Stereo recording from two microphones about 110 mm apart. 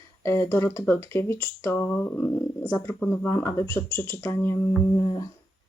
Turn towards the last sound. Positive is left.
turn(degrees=45)  # may be behind; listen again after turning